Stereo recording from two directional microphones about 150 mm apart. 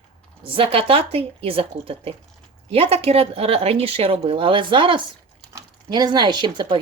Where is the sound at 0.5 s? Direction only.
40° right (ahead or behind).